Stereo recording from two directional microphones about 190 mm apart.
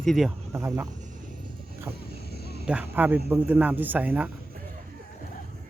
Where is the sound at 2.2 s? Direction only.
55° left (ahead or behind).